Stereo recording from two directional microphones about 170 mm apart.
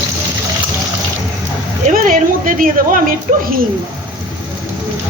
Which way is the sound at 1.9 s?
50° right (ahead or behind).